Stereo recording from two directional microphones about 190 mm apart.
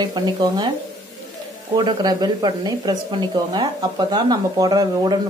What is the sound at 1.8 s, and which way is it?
A woman's voice, 25° right (ahead or behind).